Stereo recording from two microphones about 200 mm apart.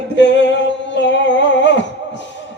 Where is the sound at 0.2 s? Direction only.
65° left (ahead or behind).